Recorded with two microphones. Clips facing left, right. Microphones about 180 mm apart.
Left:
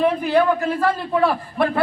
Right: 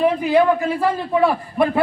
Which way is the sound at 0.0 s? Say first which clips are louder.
Right 2 dB; 10° right (ahead or behind).